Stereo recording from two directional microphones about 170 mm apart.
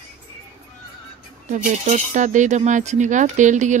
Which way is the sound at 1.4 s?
45° right (ahead or behind).